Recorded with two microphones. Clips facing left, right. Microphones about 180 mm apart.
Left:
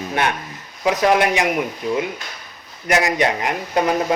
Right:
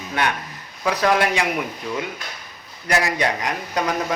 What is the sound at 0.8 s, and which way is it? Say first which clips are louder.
Speech: left 3 dB; 20° left (ahead or behind).